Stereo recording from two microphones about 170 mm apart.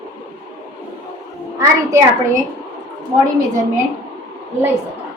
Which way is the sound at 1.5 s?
20° right (ahead or behind).